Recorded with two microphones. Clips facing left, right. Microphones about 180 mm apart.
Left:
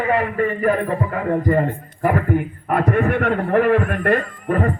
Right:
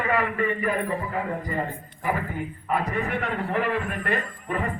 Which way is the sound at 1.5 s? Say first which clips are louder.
Left 11 dB; 60° left (ahead or behind).